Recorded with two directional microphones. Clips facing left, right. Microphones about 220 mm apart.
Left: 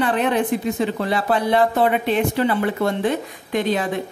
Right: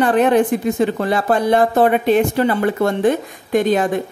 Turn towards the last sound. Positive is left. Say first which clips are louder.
# right 5 dB
turn(degrees=-45)  # may be behind; listen again after turning